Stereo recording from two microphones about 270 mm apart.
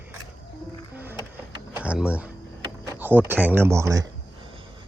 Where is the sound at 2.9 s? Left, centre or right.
Centre.